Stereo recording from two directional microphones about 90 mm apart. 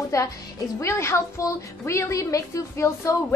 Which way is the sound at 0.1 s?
35° left (ahead or behind).